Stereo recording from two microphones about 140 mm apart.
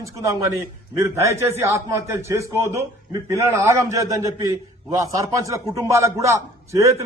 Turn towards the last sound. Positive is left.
turn(degrees=-20)  # may be behind; listen again after turning